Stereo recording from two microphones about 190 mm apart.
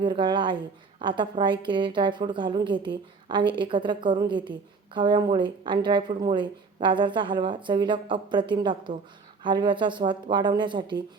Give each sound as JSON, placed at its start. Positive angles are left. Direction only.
{"t": 0.0, "sound": "a woman's voice", "side_deg": -25}